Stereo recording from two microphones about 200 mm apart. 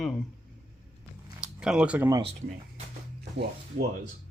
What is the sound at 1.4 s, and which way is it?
Speech, 5° right (ahead or behind).